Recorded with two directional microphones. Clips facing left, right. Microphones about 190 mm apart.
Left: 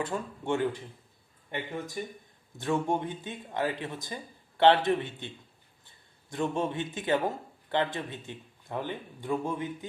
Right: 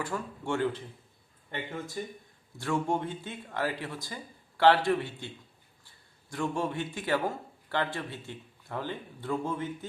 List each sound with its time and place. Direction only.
0.0 s a man's voice: 20° left (ahead or behind)
2.0 s a man's voice: 15° left (ahead or behind)
6.3 s a man's voice: 20° left (ahead or behind)